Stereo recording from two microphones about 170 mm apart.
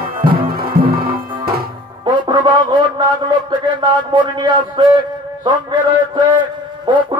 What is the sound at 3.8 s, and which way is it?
A man's voice, 25° right (ahead or behind).